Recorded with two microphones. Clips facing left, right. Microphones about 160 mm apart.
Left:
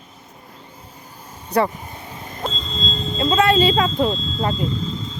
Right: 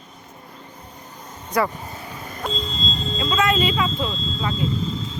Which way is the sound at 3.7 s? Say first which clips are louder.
Left 5 dB; 45° left (ahead or behind).